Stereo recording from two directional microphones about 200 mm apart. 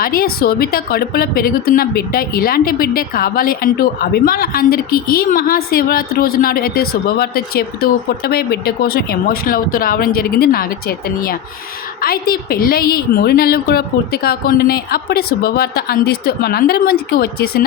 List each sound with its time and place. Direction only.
0.0 s a woman's voice: 45° left (ahead or behind)